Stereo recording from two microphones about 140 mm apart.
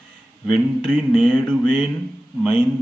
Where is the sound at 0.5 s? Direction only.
5° left (ahead or behind).